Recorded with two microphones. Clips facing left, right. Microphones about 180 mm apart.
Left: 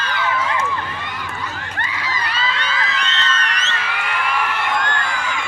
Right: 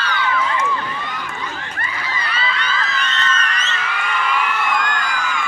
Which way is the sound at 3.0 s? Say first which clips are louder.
Right 1 dB; 75° left (ahead or behind).